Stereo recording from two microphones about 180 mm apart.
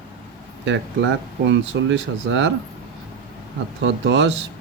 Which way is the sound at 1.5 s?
90° right.